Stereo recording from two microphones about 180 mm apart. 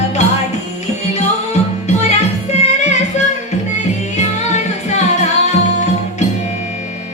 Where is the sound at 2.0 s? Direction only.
40° left (ahead or behind).